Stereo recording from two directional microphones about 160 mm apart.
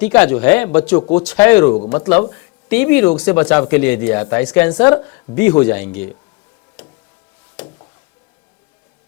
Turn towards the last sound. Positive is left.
turn(degrees=5)  # may be behind; listen again after turning